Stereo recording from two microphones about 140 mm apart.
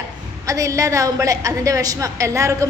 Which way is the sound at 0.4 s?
25° right (ahead or behind).